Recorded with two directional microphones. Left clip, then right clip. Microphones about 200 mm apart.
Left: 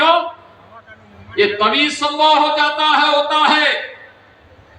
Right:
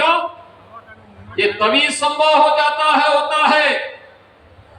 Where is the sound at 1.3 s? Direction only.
50° left (ahead or behind).